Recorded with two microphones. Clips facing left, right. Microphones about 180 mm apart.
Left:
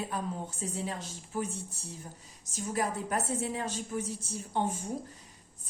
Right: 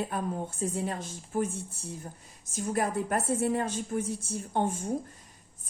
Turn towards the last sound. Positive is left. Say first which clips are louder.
# right 3 dB
turn(degrees=-50)  # may be behind; listen again after turning